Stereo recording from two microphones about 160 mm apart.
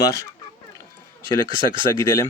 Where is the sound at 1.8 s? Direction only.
30° right (ahead or behind).